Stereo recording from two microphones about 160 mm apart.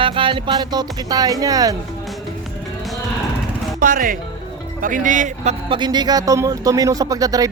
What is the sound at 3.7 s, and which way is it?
Speech, 60° right (ahead or behind).